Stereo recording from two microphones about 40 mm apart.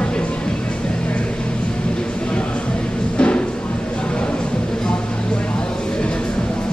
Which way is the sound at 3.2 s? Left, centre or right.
Left.